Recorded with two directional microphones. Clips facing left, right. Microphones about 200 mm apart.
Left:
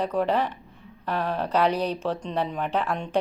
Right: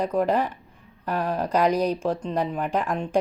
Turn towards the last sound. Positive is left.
turn(degrees=-10)  # may be behind; listen again after turning